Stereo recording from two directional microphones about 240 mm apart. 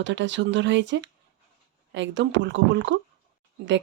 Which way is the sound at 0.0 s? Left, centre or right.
Right.